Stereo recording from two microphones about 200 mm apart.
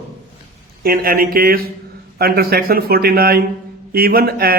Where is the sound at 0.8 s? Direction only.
45° right (ahead or behind).